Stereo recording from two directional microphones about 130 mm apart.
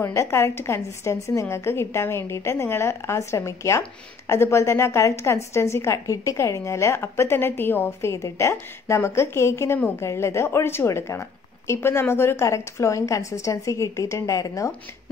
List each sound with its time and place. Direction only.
0.0 s a woman's voice: 20° left (ahead or behind)